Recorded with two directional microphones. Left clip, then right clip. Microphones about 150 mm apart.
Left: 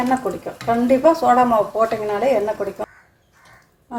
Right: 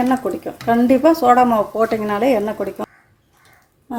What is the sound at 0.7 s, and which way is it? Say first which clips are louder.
Speech: right 1 dB; 75° right (ahead or behind).